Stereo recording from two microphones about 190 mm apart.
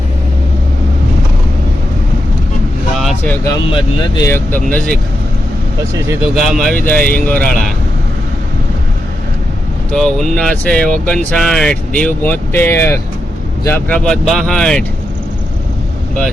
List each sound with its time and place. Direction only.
3.0 s a sound: centre (ahead or behind)
3.4 s speech: 25° left (ahead or behind); by 4.9 s 10° left (ahead or behind)
6.3 s speech: centre (ahead or behind)
9.9 s speech: 5° left (ahead or behind)